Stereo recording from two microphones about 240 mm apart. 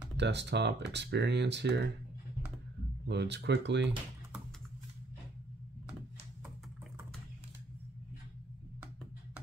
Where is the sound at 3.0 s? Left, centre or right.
Right.